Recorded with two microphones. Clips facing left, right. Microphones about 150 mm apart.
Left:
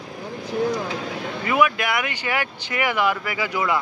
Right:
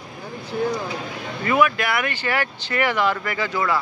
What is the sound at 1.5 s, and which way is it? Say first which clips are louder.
Speech: right 1 dB; 10° left (ahead or behind).